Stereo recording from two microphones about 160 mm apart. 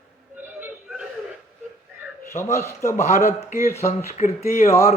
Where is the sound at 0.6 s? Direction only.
5° right (ahead or behind).